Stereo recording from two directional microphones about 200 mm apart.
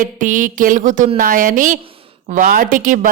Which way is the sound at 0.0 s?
40° right (ahead or behind).